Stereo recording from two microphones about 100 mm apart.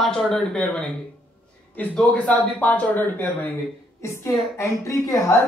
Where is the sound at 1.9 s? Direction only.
10° left (ahead or behind).